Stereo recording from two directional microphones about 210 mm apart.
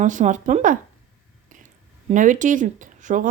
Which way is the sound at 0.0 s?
35° right (ahead or behind).